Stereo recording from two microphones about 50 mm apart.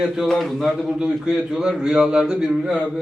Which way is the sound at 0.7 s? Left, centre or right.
Centre.